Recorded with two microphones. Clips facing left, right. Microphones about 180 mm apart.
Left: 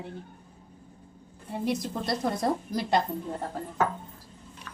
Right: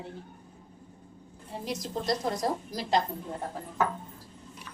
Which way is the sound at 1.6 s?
60° left (ahead or behind).